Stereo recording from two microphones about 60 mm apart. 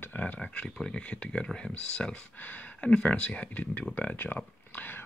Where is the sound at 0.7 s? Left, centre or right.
Centre; by 4.4 s left.